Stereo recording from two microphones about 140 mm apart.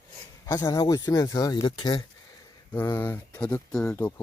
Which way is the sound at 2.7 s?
15° left (ahead or behind).